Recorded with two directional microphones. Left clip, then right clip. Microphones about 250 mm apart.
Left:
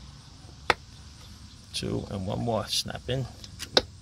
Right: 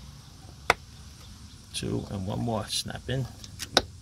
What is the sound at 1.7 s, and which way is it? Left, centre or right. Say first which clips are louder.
Speech: left 1 dB; centre.